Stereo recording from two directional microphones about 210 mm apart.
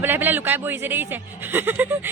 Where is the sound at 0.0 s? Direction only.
10° right (ahead or behind).